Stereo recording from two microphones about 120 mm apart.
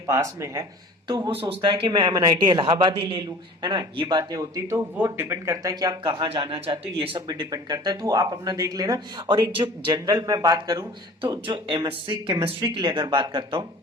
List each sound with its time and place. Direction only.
0.1 s speech: 25° right (ahead or behind)
1.5 s speech: 45° right (ahead or behind)
4.9 s speech: 20° right (ahead or behind); by 6.2 s 40° right (ahead or behind)
6.2 s speech: 50° right (ahead or behind)
7.3 s speech: 35° right (ahead or behind)
11.2 s speech: 45° right (ahead or behind)